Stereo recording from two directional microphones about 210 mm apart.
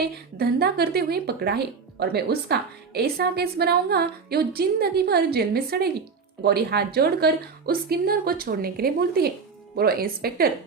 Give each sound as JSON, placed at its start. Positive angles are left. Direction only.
{"t": 0.3, "sound": "speech", "side_deg": -50}